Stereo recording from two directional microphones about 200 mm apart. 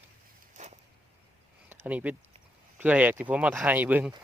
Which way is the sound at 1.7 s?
5° right (ahead or behind).